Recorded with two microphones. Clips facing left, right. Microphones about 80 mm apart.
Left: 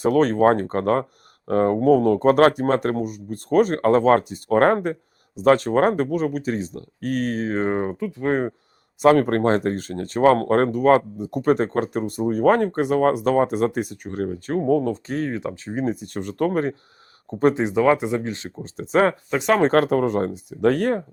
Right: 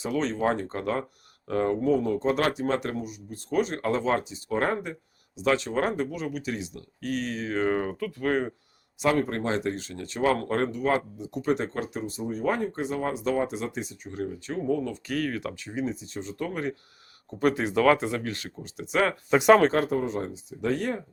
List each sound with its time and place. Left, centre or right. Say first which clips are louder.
0.0 s speech: left 10 dB; left
9.0 s speech: left 9 dB; left
15.6 s speech: left 8 dB; left
17.5 s speech: left 1 dB; left
19.3 s speech: right 2 dB; centre
19.7 s speech: left 8 dB; left